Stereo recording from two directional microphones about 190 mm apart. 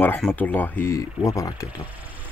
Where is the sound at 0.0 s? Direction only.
10° left (ahead or behind).